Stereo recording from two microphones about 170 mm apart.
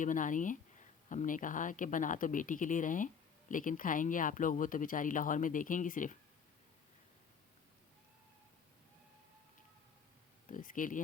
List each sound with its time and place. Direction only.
0.0 s speech: 50° left (ahead or behind)
10.5 s speech: 50° left (ahead or behind)